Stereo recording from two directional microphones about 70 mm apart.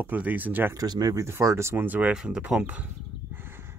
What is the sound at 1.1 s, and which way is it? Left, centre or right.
Speech, right.